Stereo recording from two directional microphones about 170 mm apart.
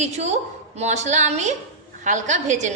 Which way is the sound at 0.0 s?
40° right (ahead or behind).